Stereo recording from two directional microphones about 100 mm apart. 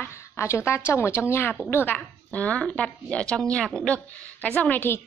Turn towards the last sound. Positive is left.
turn(degrees=20)  # may be behind; listen again after turning